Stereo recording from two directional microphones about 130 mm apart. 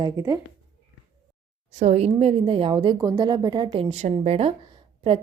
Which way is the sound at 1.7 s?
55° right (ahead or behind).